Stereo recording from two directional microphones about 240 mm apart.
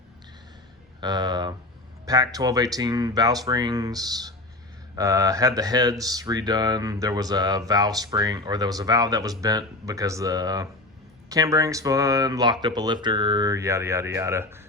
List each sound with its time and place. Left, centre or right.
1.0 s speech: centre